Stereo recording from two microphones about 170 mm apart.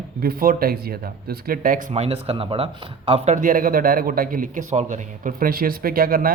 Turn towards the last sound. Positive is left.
turn(degrees=-60)  # may be behind; listen again after turning